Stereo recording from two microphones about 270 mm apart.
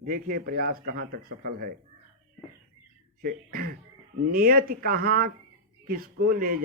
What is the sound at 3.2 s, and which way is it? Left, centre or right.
Speech, right.